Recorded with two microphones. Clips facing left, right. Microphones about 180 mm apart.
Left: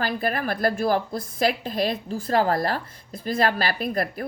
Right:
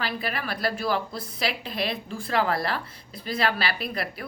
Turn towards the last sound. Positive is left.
turn(degrees=45)  # may be behind; listen again after turning